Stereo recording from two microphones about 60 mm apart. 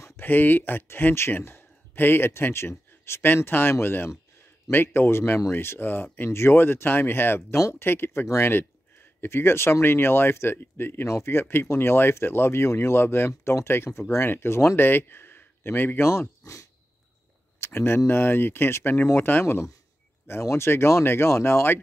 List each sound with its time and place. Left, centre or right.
0.2 s speech: left
11.1 s speech: left
17.6 s speech: left